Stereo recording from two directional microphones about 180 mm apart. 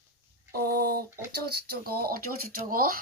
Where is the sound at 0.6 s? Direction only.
60° right (ahead or behind).